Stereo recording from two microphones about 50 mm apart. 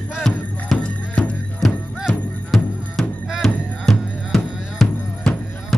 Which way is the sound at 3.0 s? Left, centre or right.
Centre.